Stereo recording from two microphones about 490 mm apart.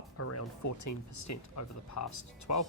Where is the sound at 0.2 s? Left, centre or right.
Left.